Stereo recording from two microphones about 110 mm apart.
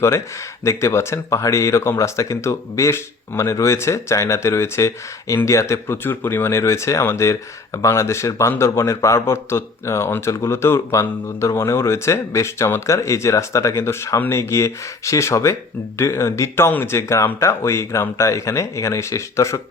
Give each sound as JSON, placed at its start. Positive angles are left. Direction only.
{"t": 0.6, "sound": "speech", "side_deg": 25}